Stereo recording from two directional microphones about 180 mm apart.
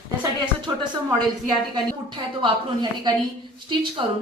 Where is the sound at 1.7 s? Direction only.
25° right (ahead or behind).